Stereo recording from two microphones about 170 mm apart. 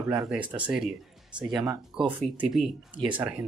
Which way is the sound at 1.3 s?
25° right (ahead or behind).